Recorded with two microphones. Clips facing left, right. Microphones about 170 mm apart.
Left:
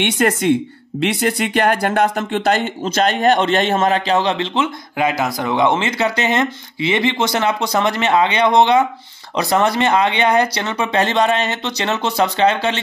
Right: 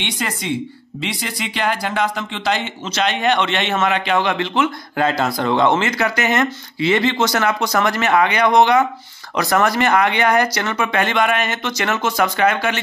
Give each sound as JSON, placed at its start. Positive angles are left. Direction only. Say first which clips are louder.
{"t": 0.0, "sound": "a man's voice", "louder": "left 9 dB", "side_deg": 60}
{"t": 4.9, "sound": "speech", "louder": "left 1 dB", "side_deg": 15}
{"t": 5.9, "sound": "speech", "louder": "left 1 dB", "side_deg": 25}